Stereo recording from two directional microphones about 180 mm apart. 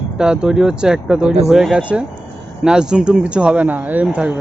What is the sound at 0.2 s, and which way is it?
Speech, 5° right (ahead or behind).